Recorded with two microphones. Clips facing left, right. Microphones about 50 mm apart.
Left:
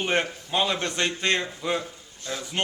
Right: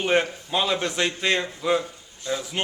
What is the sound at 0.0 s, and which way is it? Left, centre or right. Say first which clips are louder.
A man's voice: right 3 dB; centre.